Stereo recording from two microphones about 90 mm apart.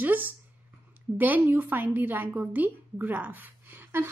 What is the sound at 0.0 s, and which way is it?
A woman's voice, 20° right (ahead or behind).